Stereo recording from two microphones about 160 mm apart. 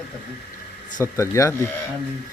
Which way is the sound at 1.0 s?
20° left (ahead or behind).